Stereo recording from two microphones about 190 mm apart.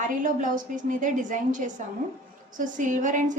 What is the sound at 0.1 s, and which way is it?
A woman's voice, 45° right (ahead or behind).